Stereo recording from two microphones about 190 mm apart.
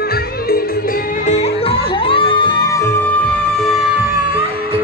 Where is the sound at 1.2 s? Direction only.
35° left (ahead or behind).